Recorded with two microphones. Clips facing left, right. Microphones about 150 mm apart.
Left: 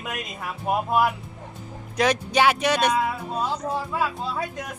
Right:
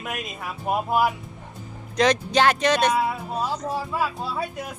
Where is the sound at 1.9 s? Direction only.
10° left (ahead or behind).